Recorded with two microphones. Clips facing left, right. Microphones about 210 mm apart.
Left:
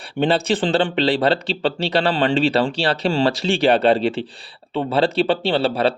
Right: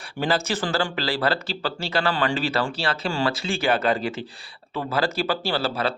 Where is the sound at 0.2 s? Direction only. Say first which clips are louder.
Left 6 dB; 30° left (ahead or behind).